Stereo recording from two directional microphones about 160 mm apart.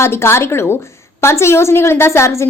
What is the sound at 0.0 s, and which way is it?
A woman's voice, 15° left (ahead or behind).